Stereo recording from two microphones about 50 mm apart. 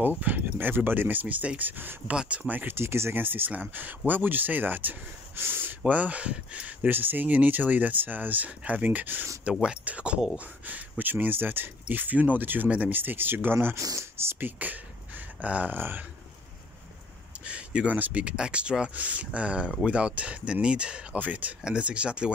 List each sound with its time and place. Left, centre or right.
0.0 s speech: right
2.1 s speech: right
2.7 s speech: right
3.2 s speech: right
5.9 s speech: right
6.9 s speech: right
9.4 s speech: right
10.7 s speech: right
12.9 s speech: right
14.4 s speech: right
17.5 s speech: right
18.3 s speech: centre